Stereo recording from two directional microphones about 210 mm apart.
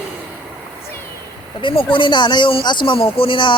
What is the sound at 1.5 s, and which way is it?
Speech, 20° left (ahead or behind).